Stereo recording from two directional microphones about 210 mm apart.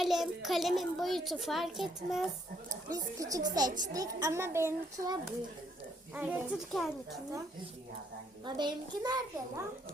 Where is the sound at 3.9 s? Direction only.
15° right (ahead or behind); by 7.2 s centre (ahead or behind).